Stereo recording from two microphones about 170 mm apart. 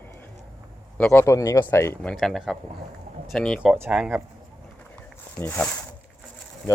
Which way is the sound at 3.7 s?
10° right (ahead or behind).